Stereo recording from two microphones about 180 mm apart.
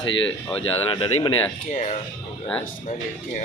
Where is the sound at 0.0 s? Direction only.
90° left.